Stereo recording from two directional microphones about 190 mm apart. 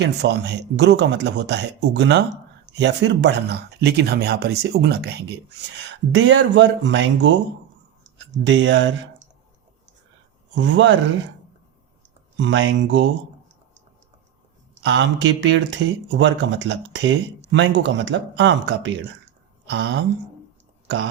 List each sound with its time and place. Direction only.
0.0 s speech: 65° right (ahead or behind)
10.5 s speech: 75° right (ahead or behind)
12.4 s speech: 75° right (ahead or behind)
14.8 s speech: 70° right (ahead or behind)
19.6 s a sound: 75° right (ahead or behind)